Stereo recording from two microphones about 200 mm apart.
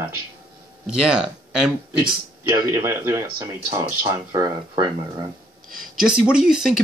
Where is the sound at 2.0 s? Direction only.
20° right (ahead or behind).